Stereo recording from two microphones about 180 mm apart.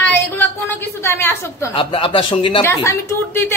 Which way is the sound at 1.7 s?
30° left (ahead or behind).